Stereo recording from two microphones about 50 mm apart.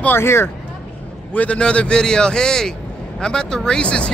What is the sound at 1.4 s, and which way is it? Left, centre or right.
A man's voice, left.